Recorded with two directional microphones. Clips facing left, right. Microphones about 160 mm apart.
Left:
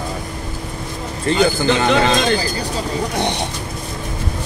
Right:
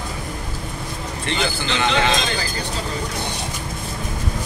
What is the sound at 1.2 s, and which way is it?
Speech, 45° left (ahead or behind).